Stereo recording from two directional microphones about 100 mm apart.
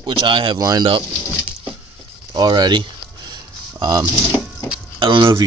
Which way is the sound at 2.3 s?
45° right (ahead or behind).